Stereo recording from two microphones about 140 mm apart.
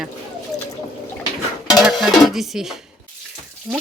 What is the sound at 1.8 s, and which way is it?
A child's voice, centre (ahead or behind).